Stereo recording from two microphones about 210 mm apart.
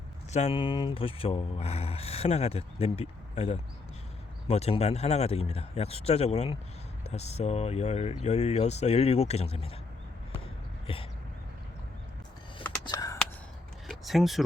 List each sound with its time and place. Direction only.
0.3 s speech: 30° left (ahead or behind)
10.9 s speech: 25° left (ahead or behind)
12.8 s caw: 20° left (ahead or behind)
13.8 s speech: centre (ahead or behind)